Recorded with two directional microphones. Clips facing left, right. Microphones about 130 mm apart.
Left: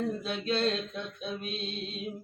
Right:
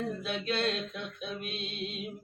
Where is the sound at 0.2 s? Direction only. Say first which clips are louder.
Left 2 dB; 35° left (ahead or behind).